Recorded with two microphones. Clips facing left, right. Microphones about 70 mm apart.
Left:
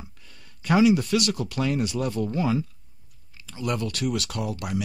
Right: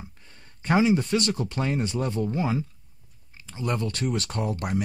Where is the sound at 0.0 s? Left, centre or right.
Right.